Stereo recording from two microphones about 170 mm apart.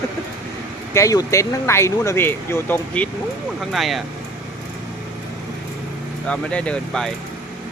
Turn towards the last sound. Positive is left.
turn(degrees=5)  # may be behind; listen again after turning